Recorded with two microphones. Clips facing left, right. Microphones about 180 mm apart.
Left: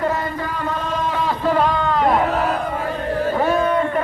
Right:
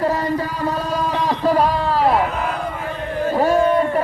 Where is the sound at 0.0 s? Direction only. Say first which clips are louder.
Right 3 dB; 35° right (ahead or behind).